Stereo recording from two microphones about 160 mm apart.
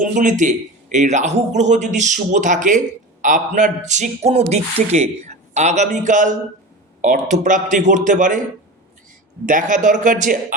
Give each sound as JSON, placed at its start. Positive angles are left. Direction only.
{"t": 0.0, "sound": "a man's voice", "side_deg": -50}
{"t": 9.5, "sound": "a man's voice", "side_deg": -55}